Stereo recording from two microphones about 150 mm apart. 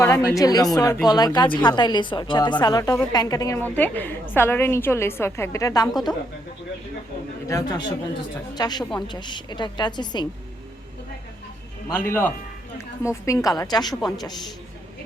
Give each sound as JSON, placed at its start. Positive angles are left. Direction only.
{"t": 0.0, "sound": "a woman's voice", "side_deg": 20}
{"t": 7.4, "sound": "a woman's voice", "side_deg": 20}
{"t": 11.9, "sound": "a woman's voice", "side_deg": 15}